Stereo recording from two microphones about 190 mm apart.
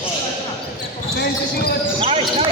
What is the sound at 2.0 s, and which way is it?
Basketball bounce, 30° right (ahead or behind).